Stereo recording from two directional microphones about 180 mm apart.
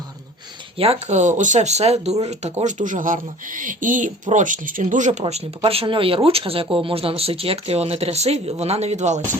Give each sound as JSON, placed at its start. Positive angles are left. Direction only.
{"t": 0.8, "sound": "speech", "side_deg": -35}
{"t": 5.2, "sound": "speech", "side_deg": -30}